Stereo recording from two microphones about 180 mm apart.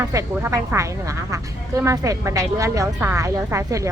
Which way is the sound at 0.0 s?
15° right (ahead or behind).